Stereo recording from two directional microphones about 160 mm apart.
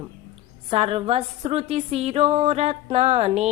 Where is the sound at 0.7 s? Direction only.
40° right (ahead or behind).